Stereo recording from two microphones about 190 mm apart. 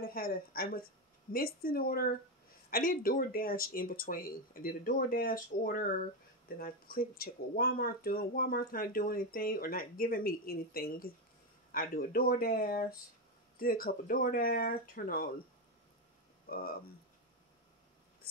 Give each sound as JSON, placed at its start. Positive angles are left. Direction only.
{"t": 0.0, "sound": "speech", "side_deg": 50}
{"t": 16.4, "sound": "speech", "side_deg": 50}